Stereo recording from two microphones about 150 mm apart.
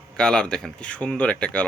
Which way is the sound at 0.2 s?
5° left (ahead or behind).